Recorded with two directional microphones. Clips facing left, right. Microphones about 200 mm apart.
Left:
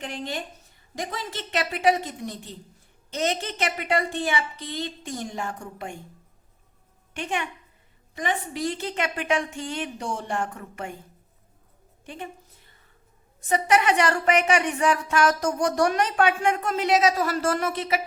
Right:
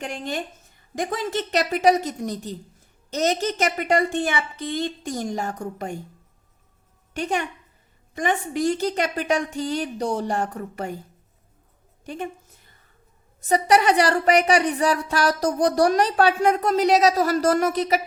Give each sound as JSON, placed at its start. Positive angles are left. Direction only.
{"t": 0.0, "sound": "a woman's voice", "side_deg": -45}
{"t": 7.2, "sound": "speech", "side_deg": -40}
{"t": 12.0, "sound": "a woman's voice", "side_deg": -45}
{"t": 13.4, "sound": "speech", "side_deg": -35}